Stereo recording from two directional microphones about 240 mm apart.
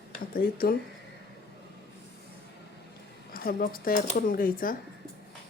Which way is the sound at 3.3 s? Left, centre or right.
Left.